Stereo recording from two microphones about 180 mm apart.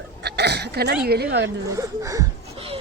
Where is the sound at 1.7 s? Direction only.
20° right (ahead or behind).